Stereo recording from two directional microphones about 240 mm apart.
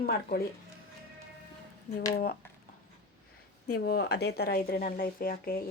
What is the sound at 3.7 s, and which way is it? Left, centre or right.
Speech, left.